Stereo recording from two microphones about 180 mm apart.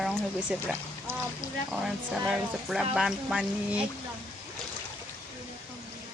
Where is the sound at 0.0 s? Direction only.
5° right (ahead or behind).